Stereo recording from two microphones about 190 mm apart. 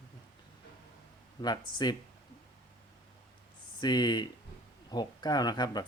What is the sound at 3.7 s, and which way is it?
Speech, 20° left (ahead or behind).